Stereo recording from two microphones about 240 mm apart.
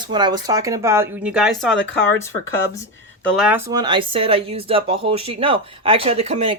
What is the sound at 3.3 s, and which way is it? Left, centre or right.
Speech, centre.